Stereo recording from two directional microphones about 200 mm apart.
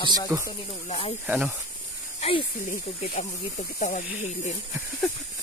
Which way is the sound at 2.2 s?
25° left (ahead or behind).